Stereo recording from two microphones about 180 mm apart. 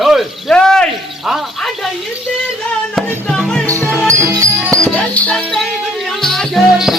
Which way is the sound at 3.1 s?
5° left (ahead or behind).